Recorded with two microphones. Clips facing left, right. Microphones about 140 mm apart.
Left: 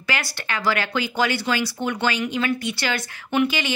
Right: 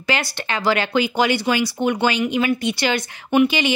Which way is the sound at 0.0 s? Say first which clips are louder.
Right 5 dB; 20° right (ahead or behind).